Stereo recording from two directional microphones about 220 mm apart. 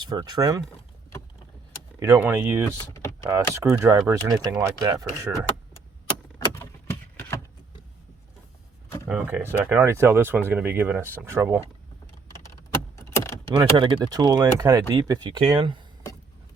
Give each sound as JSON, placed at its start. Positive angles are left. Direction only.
{"t": 0.0, "sound": "speech", "side_deg": -20}
{"t": 2.0, "sound": "speech", "side_deg": -10}
{"t": 2.9, "sound": "power windows", "side_deg": 15}
{"t": 3.2, "sound": "speech", "side_deg": -10}
{"t": 9.0, "sound": "speech", "side_deg": -5}
{"t": 13.0, "sound": "vehicle", "side_deg": 15}
{"t": 13.6, "sound": "speech", "side_deg": -20}